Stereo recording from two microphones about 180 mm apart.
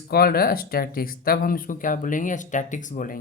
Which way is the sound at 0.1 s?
55° left (ahead or behind).